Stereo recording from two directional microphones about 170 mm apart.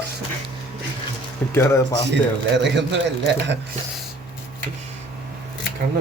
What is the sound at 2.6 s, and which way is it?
Speech, 90° right.